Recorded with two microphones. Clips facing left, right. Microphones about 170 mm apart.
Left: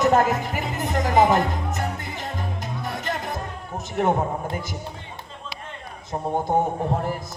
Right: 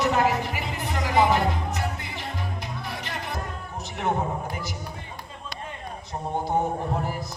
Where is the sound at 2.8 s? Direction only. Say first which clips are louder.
Left 7 dB; 45° left (ahead or behind).